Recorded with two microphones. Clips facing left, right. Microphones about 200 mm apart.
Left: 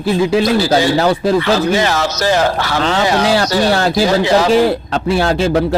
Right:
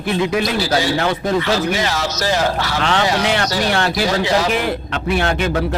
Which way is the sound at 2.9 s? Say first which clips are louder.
Left 4 dB; 35° left (ahead or behind).